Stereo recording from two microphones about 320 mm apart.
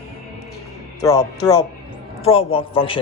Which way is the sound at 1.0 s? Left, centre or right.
Centre.